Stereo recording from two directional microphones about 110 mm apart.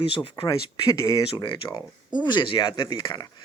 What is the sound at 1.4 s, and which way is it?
Speech, 50° left (ahead or behind).